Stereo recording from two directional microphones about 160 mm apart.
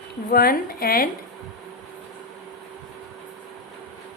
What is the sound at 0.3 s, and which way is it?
Speech, 65° left (ahead or behind).